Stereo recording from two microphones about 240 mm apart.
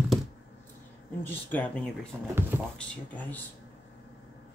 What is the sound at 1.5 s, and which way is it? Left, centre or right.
Speech, centre.